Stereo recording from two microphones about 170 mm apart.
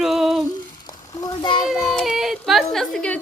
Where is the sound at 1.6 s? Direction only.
Centre (ahead or behind).